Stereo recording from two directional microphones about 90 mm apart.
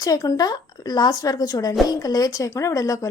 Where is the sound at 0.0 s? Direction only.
40° left (ahead or behind).